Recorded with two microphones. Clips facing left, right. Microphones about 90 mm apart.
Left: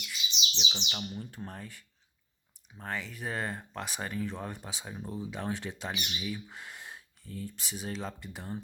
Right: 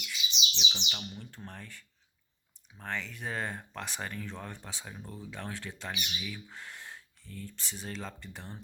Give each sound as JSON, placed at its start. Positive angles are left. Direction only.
{"t": 0.0, "sound": "bird", "side_deg": 15}
{"t": 0.6, "sound": "speech", "side_deg": 5}